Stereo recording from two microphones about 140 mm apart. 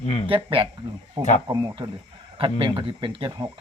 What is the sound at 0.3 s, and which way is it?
Speech, 40° right (ahead or behind).